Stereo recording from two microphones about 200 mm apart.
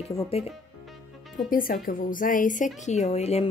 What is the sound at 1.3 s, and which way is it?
A woman's voice, 45° left (ahead or behind).